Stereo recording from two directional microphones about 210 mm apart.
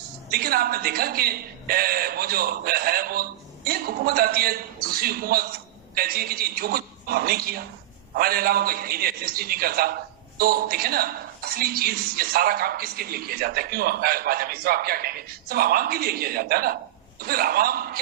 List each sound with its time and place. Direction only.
0.3 s a woman's voice: 45° right (ahead or behind)